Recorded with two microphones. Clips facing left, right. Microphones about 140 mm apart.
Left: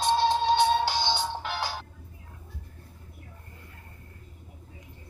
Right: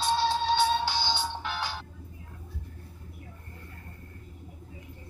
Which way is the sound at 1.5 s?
35° left (ahead or behind).